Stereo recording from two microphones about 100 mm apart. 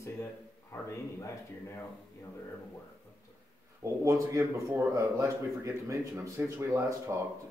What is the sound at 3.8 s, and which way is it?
A man's voice, 30° right (ahead or behind).